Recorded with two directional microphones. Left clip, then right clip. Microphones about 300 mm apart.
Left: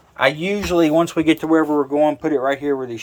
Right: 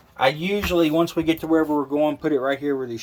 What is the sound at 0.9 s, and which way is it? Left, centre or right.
Speech, left.